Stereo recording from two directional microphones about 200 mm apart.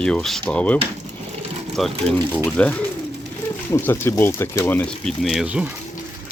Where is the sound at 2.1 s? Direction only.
5° left (ahead or behind).